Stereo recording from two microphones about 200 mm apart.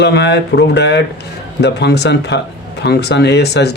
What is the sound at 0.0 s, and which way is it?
Speech, 55° left (ahead or behind).